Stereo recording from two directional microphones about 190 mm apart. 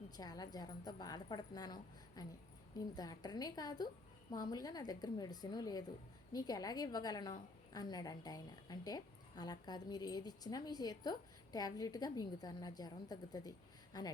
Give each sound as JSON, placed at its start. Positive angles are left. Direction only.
{"t": 0.2, "sound": "a woman's voice", "side_deg": 20}